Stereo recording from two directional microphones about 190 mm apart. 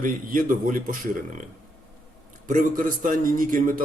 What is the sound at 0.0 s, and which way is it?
Speech, 45° right (ahead or behind).